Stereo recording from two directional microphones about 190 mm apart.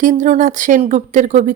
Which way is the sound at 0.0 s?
40° right (ahead or behind).